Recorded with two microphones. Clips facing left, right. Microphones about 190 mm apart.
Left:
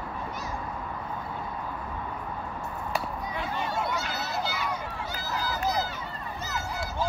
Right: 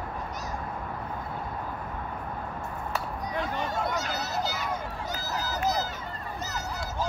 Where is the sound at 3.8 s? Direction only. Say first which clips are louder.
Right 1 dB; 45° right (ahead or behind).